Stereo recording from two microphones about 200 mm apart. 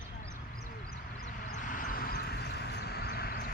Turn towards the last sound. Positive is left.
turn(degrees=50)  # may be behind; listen again after turning